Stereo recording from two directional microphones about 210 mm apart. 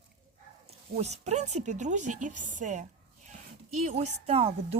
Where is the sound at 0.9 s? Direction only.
30° right (ahead or behind).